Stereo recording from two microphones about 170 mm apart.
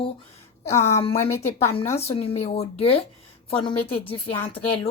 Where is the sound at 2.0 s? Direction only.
35° left (ahead or behind).